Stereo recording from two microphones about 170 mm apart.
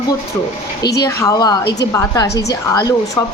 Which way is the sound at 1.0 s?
20° left (ahead or behind).